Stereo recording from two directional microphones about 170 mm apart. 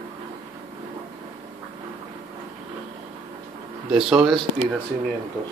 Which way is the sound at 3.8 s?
5° right (ahead or behind).